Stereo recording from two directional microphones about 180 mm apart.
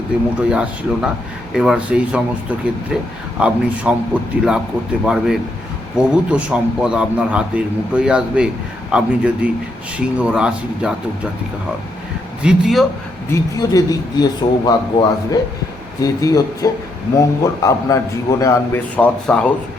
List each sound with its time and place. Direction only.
0.5 s a man's voice: 5° right (ahead or behind)
12.4 s a man's voice: 5° right (ahead or behind)
13.3 s a man's voice: 20° left (ahead or behind)